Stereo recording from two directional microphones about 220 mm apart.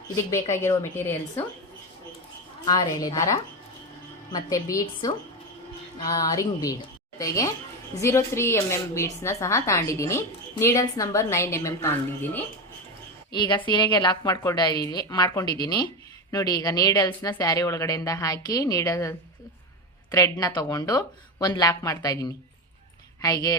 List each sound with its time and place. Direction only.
0.3 s speech: 15° left (ahead or behind)
2.6 s speech: 15° left (ahead or behind)
13.3 s a woman's voice: 20° left (ahead or behind)